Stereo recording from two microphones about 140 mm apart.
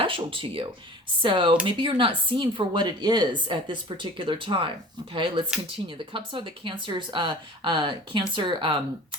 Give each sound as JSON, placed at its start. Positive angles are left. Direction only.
{"t": 0.0, "sound": "speech", "side_deg": -40}